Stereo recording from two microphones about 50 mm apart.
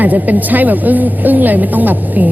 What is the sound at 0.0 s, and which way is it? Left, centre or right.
A woman's voice, right.